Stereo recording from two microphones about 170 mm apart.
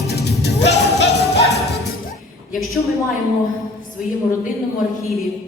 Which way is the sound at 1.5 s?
20° right (ahead or behind).